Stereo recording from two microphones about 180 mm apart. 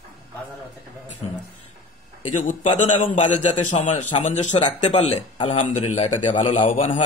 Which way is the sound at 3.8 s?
40° left (ahead or behind).